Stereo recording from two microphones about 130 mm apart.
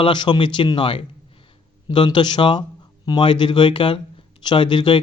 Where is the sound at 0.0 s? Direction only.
35° left (ahead or behind).